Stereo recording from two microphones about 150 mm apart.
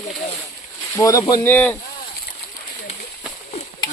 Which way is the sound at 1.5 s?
10° left (ahead or behind).